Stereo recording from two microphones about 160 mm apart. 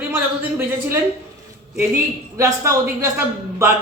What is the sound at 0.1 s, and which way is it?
Speech, 15° right (ahead or behind).